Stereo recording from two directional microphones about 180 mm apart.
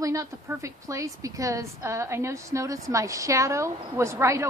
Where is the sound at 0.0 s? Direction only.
20° right (ahead or behind).